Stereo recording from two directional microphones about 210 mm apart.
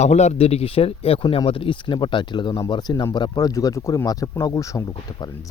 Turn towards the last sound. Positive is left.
turn(degrees=15)  # may be behind; listen again after turning